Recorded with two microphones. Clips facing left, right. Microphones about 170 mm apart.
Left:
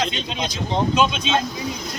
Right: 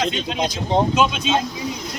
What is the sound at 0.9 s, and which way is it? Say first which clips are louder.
Speech: right 1 dB; 5° right (ahead or behind).